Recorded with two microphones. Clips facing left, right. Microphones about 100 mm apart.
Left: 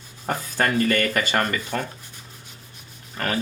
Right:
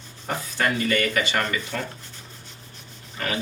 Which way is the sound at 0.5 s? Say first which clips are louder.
Left 2 dB; 45° left (ahead or behind).